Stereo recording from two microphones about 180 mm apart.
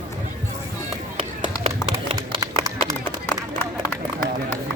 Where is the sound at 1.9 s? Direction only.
20° right (ahead or behind).